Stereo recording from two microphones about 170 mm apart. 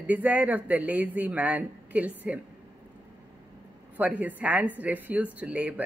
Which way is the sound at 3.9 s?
10° right (ahead or behind).